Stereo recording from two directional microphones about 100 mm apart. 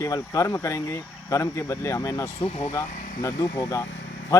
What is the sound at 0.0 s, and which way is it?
Speech, 30° left (ahead or behind).